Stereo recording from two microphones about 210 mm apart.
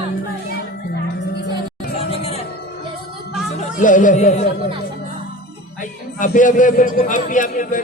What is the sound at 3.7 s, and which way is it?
Music, 40° left (ahead or behind).